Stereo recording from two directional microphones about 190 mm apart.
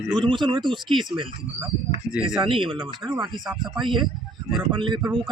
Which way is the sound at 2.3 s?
25° right (ahead or behind).